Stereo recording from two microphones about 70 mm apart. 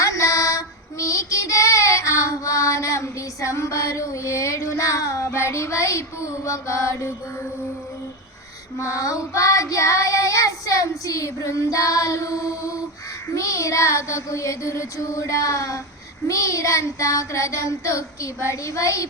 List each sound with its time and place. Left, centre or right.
0.0 s child singing: left
8.8 s child singing: left